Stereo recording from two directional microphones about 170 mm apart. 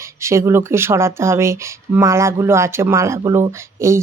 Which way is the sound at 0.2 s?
15° right (ahead or behind).